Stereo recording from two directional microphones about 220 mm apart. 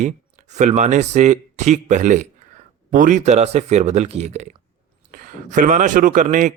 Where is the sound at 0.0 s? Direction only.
35° right (ahead or behind).